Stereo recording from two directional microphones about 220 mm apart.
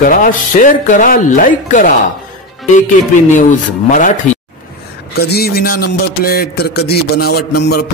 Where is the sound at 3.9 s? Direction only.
35° left (ahead or behind).